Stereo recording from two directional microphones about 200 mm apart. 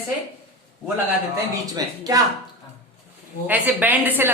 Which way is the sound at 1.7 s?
20° right (ahead or behind).